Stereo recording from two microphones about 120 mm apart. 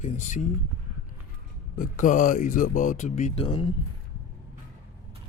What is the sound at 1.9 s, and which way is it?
Speech, 90° left.